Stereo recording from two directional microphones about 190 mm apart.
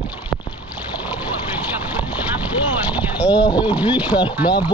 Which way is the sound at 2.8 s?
5° right (ahead or behind).